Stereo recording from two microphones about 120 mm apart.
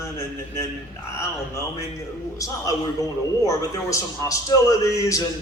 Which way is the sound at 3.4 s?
25° left (ahead or behind).